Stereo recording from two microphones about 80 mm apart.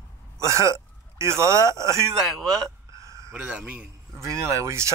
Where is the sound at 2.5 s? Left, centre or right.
Right.